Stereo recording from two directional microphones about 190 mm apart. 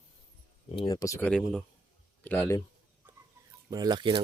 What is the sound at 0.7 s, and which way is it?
Speech, 20° left (ahead or behind).